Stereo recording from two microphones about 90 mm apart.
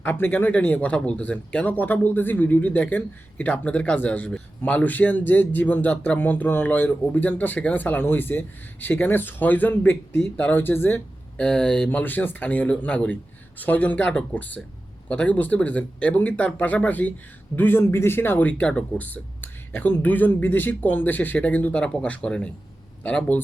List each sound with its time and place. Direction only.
0.0 s speech: 20° left (ahead or behind)
11.9 s speech: 20° left (ahead or behind)